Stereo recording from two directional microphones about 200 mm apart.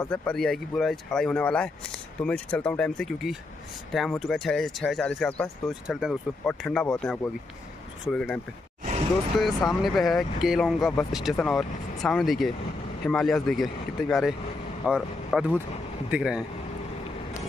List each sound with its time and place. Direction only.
0.1 s speech: 5° left (ahead or behind)
9.4 s speech: centre (ahead or behind)